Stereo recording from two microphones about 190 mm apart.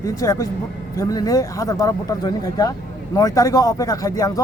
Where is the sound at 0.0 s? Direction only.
15° left (ahead or behind).